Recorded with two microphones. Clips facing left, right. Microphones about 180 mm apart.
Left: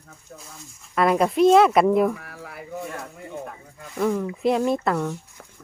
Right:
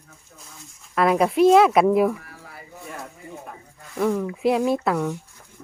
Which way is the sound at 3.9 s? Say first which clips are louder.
Right 1 dB; centre (ahead or behind).